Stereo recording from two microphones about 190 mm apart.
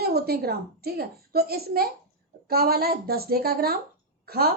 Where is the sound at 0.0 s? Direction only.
55° right (ahead or behind).